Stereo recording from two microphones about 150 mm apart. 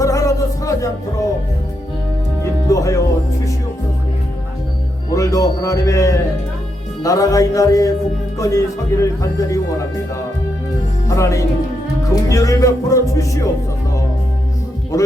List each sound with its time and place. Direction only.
0.0 s music: 20° left (ahead or behind)
2.4 s music: 20° left (ahead or behind)
5.1 s speech: 20° left (ahead or behind)
11.1 s speech: 20° left (ahead or behind)